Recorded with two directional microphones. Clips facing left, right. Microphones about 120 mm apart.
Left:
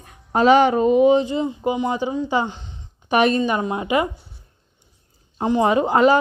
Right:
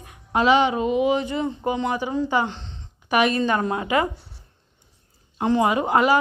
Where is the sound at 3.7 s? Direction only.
20° left (ahead or behind).